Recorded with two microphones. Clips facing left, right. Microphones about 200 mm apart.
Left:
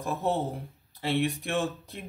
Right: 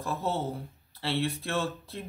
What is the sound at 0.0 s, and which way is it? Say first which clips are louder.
Speech: left 2 dB; 15° left (ahead or behind).